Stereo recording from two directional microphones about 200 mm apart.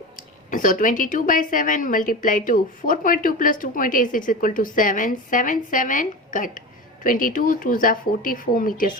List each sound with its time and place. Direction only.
0.2 s a woman's voice: 40° left (ahead or behind)